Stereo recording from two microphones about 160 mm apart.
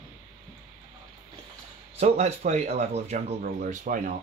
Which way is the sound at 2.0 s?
45° right (ahead or behind).